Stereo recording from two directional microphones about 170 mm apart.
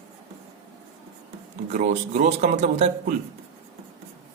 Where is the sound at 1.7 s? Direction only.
45° right (ahead or behind).